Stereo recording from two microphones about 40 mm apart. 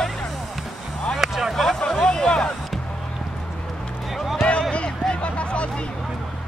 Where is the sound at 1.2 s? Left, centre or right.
Centre.